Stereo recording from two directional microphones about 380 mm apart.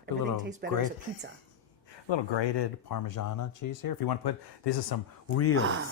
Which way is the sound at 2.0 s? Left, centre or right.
Left.